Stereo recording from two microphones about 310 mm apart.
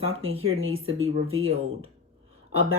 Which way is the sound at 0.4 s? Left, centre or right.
Right.